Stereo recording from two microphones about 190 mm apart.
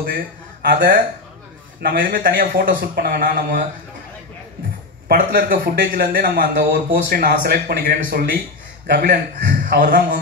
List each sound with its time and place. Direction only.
0.0 s speech: 50° right (ahead or behind)
5.0 s speech: 50° right (ahead or behind)